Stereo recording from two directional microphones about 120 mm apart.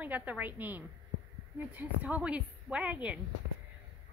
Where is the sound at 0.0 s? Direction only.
15° right (ahead or behind).